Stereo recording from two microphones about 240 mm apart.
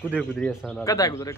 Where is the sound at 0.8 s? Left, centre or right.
Centre.